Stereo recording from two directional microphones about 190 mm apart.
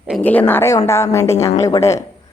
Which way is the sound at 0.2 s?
10° left (ahead or behind).